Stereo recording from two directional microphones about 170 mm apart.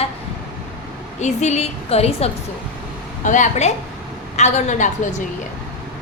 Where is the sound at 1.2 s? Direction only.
40° left (ahead or behind).